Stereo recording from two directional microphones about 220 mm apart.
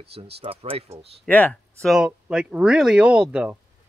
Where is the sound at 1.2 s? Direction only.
5° left (ahead or behind).